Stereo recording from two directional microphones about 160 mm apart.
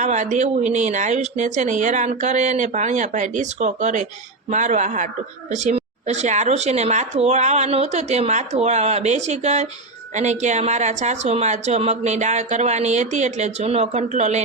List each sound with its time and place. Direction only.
0.0 s a woman's voice: 50° right (ahead or behind)